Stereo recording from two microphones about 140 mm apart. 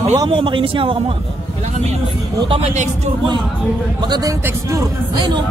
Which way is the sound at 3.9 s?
30° right (ahead or behind).